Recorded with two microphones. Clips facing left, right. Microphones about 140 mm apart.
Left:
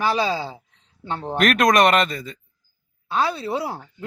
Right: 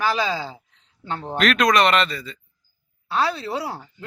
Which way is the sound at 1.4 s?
45° left (ahead or behind).